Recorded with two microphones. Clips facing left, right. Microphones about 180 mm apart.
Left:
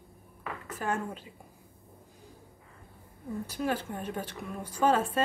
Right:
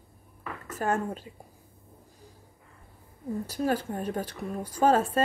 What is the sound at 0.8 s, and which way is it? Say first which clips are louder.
Speech: right 5 dB; 40° right (ahead or behind).